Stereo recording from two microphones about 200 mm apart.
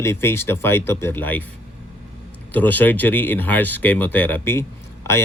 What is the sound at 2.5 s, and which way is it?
Speech, 10° left (ahead or behind).